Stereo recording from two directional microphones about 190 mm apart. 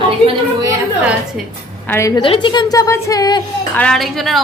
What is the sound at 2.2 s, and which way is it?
A woman's voice, 25° left (ahead or behind).